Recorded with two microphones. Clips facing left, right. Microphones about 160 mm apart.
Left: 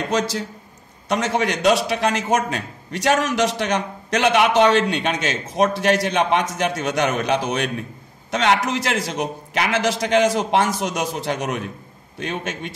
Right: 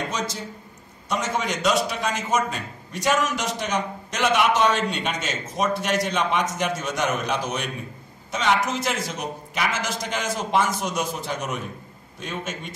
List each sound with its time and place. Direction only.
0.1 s a man's voice: 70° left (ahead or behind)